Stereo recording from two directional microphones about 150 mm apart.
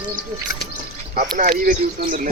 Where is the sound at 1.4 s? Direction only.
75° right (ahead or behind).